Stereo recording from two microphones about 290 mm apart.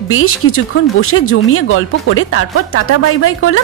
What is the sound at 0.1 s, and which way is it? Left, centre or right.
Speech, left.